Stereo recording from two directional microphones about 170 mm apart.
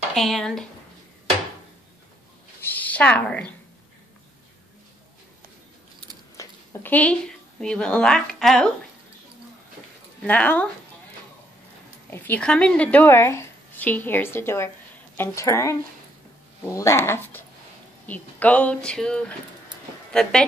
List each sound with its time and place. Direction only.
0.1 s speech: centre (ahead or behind)
2.6 s a sound: 10° left (ahead or behind)
6.3 s speech: 10° left (ahead or behind)
10.2 s a woman's voice: 10° left (ahead or behind)
12.1 s a woman's voice: 10° left (ahead or behind)
16.7 s a woman's voice: 15° left (ahead or behind)